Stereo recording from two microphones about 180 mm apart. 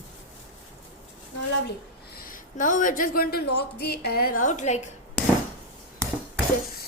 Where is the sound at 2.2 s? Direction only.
50° left (ahead or behind).